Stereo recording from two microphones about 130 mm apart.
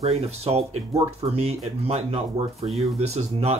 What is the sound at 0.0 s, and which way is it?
Speech, 50° right (ahead or behind).